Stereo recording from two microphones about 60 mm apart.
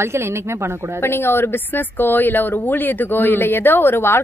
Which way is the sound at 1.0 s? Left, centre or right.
Left.